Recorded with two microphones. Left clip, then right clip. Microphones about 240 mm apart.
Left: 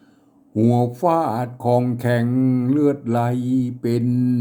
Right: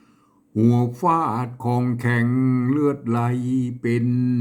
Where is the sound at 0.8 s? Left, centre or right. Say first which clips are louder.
Left 1 dB; right.